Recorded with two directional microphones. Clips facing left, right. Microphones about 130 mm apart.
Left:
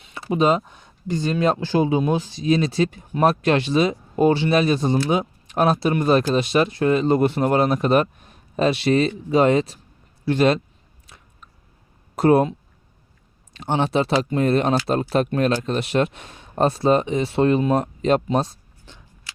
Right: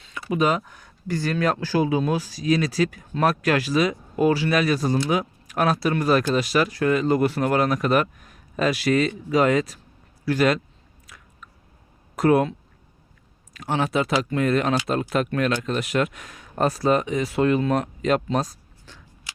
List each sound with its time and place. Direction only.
0.0 s speech: 30° left (ahead or behind)
11.0 s biting: 25° left (ahead or behind)
12.1 s speech: 30° left (ahead or behind)
18.3 s a sound: 25° left (ahead or behind)